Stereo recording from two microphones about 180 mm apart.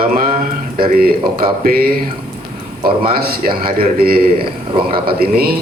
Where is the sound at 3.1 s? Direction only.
55° right (ahead or behind).